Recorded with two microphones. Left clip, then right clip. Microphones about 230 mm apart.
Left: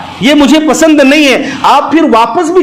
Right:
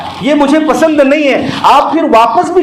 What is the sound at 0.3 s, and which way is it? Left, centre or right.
A man's voice, left.